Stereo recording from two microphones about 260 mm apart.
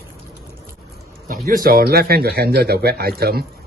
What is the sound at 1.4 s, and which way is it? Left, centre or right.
Speech, right.